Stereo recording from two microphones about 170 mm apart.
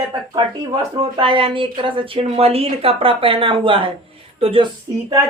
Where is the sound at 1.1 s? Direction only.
30° right (ahead or behind).